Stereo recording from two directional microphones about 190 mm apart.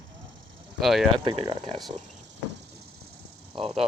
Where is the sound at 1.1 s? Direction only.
25° right (ahead or behind).